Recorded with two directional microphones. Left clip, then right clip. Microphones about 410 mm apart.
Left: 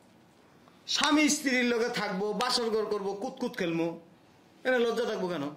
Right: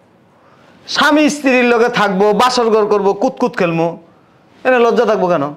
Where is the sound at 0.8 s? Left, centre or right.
Right.